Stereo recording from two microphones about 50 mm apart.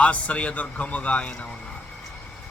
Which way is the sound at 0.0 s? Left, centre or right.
Left.